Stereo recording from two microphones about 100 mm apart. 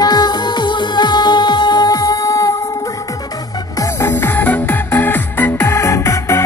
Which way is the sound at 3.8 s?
25° left (ahead or behind).